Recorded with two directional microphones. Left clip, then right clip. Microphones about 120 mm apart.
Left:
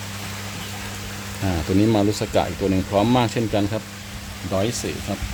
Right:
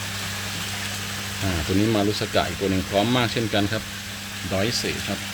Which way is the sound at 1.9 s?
30° left (ahead or behind).